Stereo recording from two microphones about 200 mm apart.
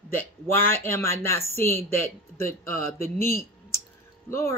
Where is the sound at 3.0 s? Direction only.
15° left (ahead or behind).